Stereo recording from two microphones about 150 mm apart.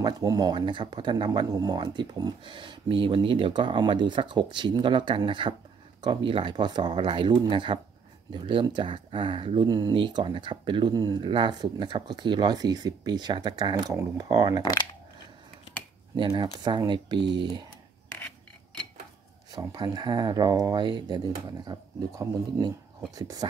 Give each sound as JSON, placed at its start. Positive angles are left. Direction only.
{"t": 0.0, "sound": "speech", "side_deg": -25}
{"t": 14.6, "sound": "speech", "side_deg": 25}
{"t": 16.2, "sound": "speech", "side_deg": -30}
{"t": 19.5, "sound": "speech", "side_deg": -25}